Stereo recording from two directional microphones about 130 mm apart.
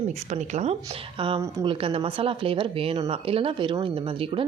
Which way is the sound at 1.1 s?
40° right (ahead or behind).